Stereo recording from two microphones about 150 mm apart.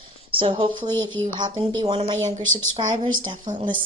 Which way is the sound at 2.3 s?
55° right (ahead or behind).